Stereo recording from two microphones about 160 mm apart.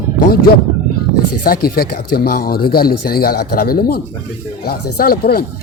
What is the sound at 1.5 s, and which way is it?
Speech, 70° left (ahead or behind).